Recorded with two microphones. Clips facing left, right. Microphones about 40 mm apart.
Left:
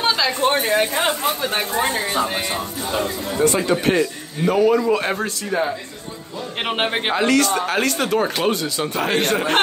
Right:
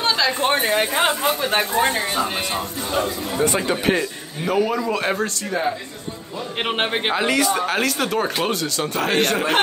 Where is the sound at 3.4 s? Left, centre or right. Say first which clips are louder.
Left 3 dB; centre.